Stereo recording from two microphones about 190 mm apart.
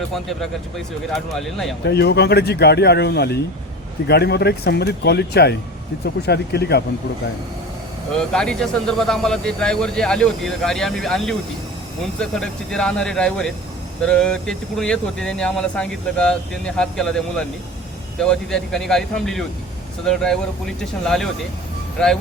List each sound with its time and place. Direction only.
1.1 s speech: centre (ahead or behind)
1.8 s speech: 60° left (ahead or behind)
8.3 s speech: 5° left (ahead or behind)